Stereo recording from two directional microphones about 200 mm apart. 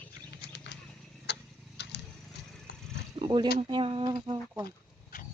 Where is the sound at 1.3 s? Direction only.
55° left (ahead or behind).